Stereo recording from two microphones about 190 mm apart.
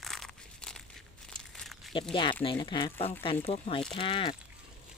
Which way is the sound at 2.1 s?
25° left (ahead or behind).